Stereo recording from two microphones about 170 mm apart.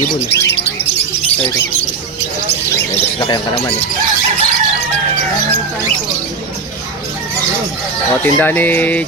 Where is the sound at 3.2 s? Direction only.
25° left (ahead or behind).